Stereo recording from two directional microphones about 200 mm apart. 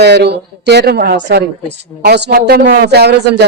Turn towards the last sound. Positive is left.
turn(degrees=-55)  # may be behind; listen again after turning